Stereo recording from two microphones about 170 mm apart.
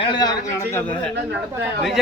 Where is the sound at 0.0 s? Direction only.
25° left (ahead or behind).